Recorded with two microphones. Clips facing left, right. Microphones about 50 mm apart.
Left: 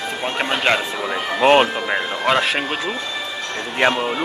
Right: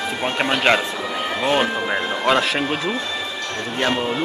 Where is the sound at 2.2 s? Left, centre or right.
Centre.